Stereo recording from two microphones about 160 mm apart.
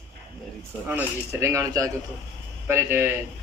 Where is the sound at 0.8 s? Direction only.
15° right (ahead or behind).